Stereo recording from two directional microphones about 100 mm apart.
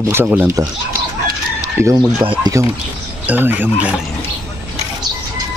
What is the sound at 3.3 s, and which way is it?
Speech, 20° right (ahead or behind).